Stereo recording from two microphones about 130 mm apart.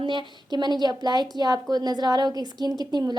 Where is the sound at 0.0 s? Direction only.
35° right (ahead or behind).